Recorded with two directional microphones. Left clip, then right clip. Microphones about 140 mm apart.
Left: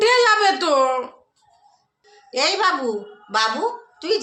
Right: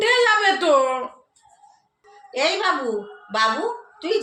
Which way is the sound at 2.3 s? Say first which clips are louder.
Left 2 dB; 20° left (ahead or behind).